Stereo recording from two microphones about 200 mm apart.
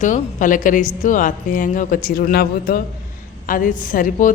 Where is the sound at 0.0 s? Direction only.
40° left (ahead or behind).